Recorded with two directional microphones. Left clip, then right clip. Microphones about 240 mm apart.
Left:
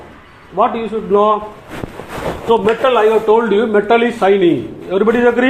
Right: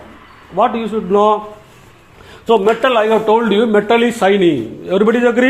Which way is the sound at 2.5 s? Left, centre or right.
Right.